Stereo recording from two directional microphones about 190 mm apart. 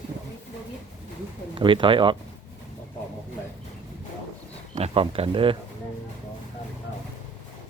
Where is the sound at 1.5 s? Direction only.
25° right (ahead or behind).